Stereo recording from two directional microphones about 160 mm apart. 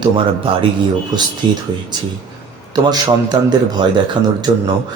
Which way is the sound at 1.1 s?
25° right (ahead or behind).